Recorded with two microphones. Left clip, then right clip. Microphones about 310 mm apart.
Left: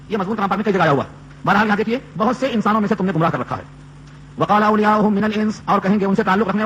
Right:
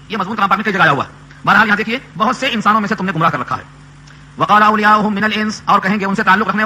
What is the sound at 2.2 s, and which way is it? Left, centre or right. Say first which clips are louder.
A man's voice: right 5 dB; centre.